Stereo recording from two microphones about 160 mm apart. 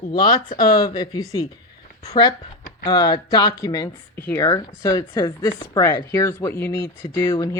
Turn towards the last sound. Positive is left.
turn(degrees=25)  # may be behind; listen again after turning